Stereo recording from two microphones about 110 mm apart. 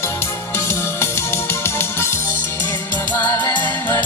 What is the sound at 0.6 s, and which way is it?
Music, 25° left (ahead or behind).